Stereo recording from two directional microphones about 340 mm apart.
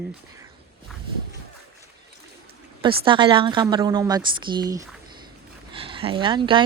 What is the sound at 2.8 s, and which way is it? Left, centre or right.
A man's voice, centre.